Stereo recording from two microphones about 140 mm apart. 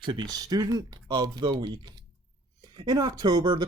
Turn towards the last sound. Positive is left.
turn(degrees=-30)  # may be behind; listen again after turning